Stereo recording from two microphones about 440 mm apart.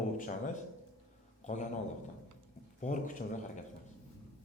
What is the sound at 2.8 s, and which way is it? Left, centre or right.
Speech, centre.